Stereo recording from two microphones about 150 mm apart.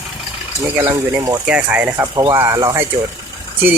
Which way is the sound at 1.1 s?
20° right (ahead or behind).